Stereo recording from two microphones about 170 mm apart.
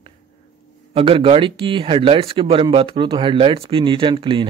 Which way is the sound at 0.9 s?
30° right (ahead or behind).